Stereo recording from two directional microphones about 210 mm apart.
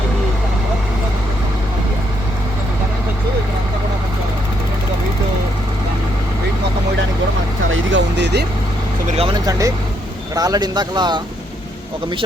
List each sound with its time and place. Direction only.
7.7 s a sound: 60° right (ahead or behind)
9.0 s vehicle: 25° right (ahead or behind)
10.3 s speech: 20° right (ahead or behind)